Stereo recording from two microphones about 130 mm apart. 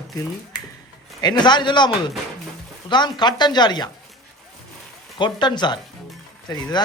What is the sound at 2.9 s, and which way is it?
Speech, 35° left (ahead or behind).